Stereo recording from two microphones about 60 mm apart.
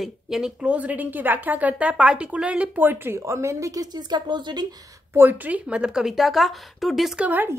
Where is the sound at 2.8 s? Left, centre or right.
Right.